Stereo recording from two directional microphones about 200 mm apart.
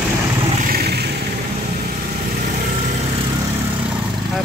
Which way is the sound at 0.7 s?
50° right (ahead or behind).